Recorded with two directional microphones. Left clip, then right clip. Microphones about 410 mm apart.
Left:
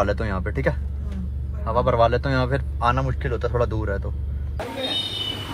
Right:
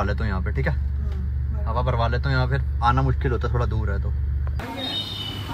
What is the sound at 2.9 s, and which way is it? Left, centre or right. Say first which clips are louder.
Speech: right 1 dB; centre.